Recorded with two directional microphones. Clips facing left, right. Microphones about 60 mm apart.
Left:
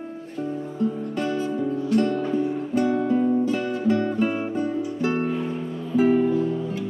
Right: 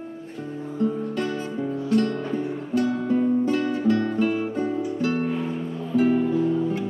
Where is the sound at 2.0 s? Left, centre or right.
Centre.